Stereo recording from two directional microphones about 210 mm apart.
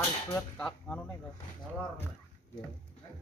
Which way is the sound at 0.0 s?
10° left (ahead or behind).